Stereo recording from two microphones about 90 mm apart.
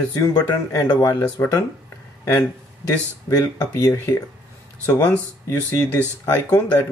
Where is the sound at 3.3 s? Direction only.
45° left (ahead or behind).